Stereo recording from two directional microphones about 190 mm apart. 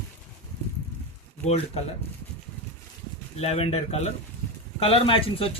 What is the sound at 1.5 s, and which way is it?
Speech, 35° left (ahead or behind).